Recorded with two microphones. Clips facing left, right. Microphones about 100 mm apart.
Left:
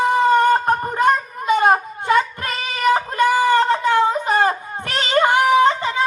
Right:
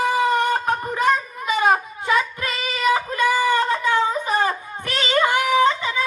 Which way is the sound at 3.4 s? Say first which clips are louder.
Left 4 dB; 35° left (ahead or behind).